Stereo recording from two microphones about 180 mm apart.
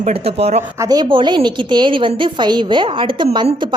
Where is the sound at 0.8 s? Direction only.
25° right (ahead or behind).